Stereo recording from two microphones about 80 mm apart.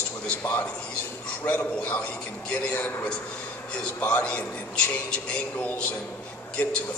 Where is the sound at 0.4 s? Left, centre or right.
Left.